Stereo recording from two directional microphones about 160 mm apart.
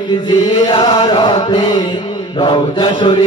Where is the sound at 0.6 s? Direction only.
35° left (ahead or behind).